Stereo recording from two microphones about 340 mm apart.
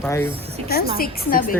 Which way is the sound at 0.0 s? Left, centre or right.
Centre.